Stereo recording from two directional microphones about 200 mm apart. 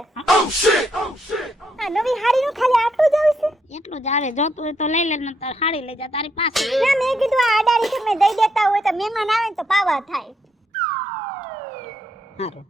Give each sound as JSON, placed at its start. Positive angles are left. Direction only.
{"t": 0.3, "sound": "speech", "side_deg": 0}
{"t": 3.8, "sound": "a woman's voice", "side_deg": 35}
{"t": 6.5, "sound": "a child's voice", "side_deg": 0}
{"t": 12.4, "sound": "a woman's voice", "side_deg": 30}